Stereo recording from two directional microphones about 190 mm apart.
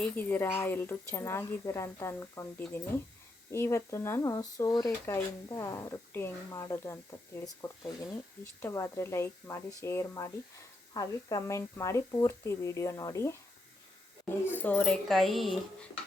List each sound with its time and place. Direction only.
0.0 s speech: 10° left (ahead or behind)
14.4 s speech: 10° left (ahead or behind)